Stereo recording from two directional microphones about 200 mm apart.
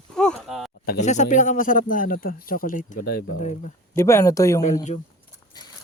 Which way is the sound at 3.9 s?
15° left (ahead or behind).